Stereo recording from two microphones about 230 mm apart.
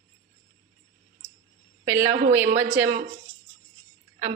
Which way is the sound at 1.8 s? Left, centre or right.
Centre.